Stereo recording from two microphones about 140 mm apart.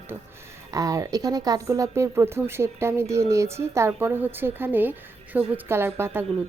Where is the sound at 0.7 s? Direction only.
25° right (ahead or behind).